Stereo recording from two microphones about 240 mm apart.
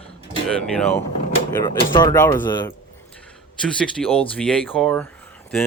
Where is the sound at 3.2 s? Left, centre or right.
Centre.